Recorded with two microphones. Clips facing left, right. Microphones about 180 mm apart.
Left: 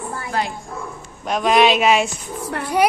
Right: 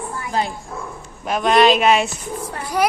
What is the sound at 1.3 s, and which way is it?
Speech, centre (ahead or behind).